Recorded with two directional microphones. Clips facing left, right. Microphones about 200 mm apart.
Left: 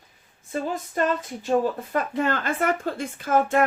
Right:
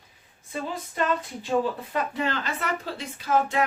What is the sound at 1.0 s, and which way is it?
Speech, 45° left (ahead or behind).